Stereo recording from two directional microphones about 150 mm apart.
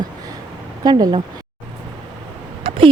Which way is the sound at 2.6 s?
35° right (ahead or behind).